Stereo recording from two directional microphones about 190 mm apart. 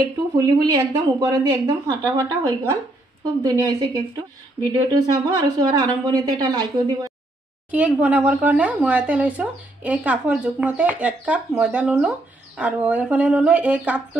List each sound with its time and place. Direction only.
0.0 s a woman's voice: 20° right (ahead or behind)
5.4 s a woman's voice: 20° right (ahead or behind)
7.7 s speech: 10° right (ahead or behind)